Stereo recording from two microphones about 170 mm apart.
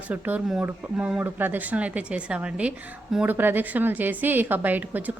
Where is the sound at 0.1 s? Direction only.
10° right (ahead or behind).